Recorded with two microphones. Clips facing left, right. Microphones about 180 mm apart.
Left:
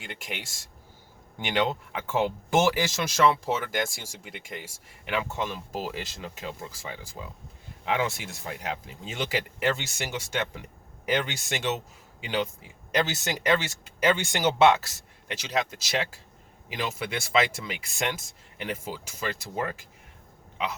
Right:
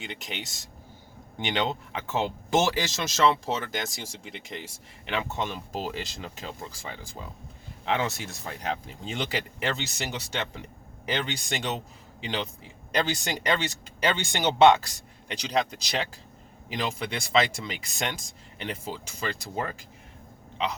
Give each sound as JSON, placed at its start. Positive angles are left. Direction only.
{"t": 0.1, "sound": "speech", "side_deg": 10}